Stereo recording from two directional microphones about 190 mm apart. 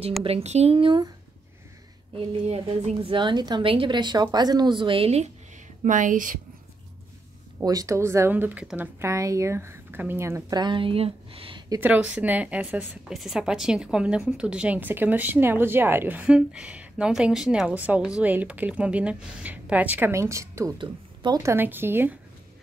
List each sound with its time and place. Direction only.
0.2 s a woman's voice: 30° right (ahead or behind)
2.1 s a woman's voice: 35° right (ahead or behind)
5.9 s speech: 40° right (ahead or behind)
7.6 s a woman's voice: 20° right (ahead or behind)
11.8 s a woman's voice: 10° right (ahead or behind)